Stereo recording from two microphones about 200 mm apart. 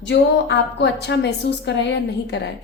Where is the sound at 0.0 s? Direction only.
60° left (ahead or behind).